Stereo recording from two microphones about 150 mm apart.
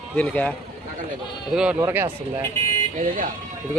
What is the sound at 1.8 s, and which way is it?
Speech, 15° right (ahead or behind).